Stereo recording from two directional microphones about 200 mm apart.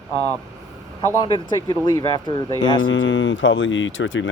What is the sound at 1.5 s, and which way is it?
Speech, 20° left (ahead or behind).